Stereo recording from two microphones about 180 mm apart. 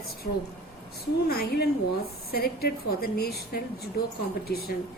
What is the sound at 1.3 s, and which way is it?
A woman's voice, 60° left (ahead or behind).